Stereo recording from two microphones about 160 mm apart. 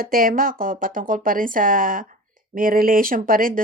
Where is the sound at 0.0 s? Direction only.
65° right (ahead or behind).